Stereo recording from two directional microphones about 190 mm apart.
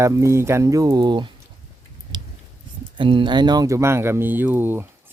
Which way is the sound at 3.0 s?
25° right (ahead or behind).